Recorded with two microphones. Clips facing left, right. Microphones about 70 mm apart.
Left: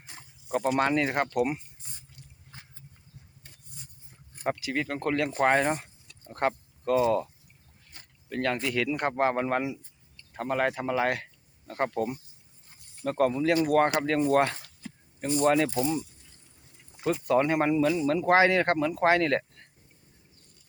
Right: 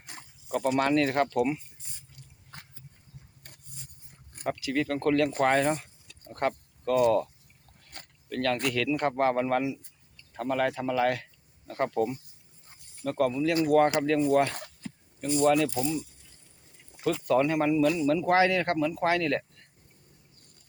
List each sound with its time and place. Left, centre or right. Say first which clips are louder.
0.9 s speech: right 2 dB; centre
4.4 s speech: right 1 dB; left
8.3 s speech: right 1 dB; left
17.2 s speech: even; left